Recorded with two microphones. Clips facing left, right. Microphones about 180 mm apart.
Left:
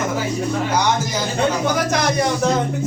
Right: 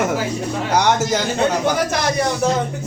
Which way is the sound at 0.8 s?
70° right (ahead or behind).